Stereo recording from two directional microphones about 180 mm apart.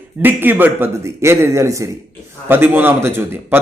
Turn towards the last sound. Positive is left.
turn(degrees=-10)  # may be behind; listen again after turning